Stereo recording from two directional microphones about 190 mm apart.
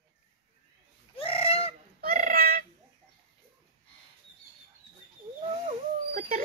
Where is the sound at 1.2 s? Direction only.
30° left (ahead or behind).